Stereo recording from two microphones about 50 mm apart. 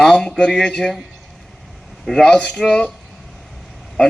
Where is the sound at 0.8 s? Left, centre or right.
Centre.